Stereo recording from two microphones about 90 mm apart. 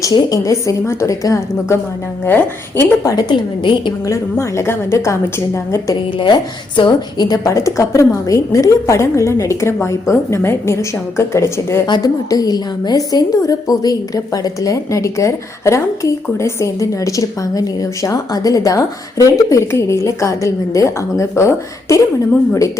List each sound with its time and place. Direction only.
0.0 s a woman's voice: 40° left (ahead or behind)
2.2 s a woman's voice: 25° left (ahead or behind)
3.0 s a woman's voice: 35° left (ahead or behind)
3.2 s a woman's voice: 60° left (ahead or behind)
4.0 s a woman's voice: 35° left (ahead or behind)
6.1 s a woman's voice: 60° left (ahead or behind)
7.5 s a woman's voice: 35° left (ahead or behind)
11.9 s a woman's voice: 45° left (ahead or behind)